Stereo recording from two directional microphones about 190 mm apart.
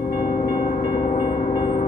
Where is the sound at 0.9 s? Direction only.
45° left (ahead or behind).